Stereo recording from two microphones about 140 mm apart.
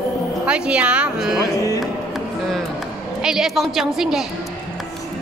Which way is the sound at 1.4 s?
25° left (ahead or behind).